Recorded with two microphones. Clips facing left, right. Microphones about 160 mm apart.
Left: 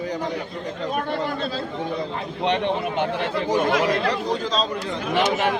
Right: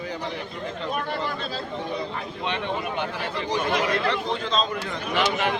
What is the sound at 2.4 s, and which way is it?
Speech, 65° left (ahead or behind).